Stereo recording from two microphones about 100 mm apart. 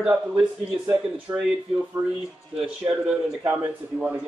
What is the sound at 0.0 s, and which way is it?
Speech, 5° right (ahead or behind).